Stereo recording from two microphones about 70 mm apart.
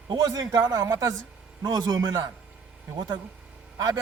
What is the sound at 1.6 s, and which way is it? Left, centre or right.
Speech, right.